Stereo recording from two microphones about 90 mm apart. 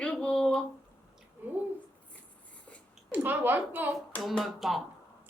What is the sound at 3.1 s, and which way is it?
Speech, 20° right (ahead or behind).